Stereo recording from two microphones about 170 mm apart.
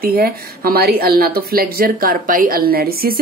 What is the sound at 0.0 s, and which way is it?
A woman's voice, 60° right (ahead or behind).